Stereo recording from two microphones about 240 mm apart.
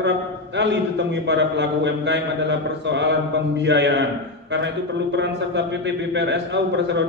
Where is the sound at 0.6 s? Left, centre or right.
Right.